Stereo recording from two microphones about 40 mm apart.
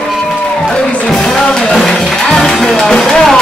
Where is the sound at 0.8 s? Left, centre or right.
Left.